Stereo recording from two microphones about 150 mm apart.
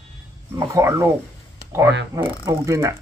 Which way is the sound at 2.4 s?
20° right (ahead or behind).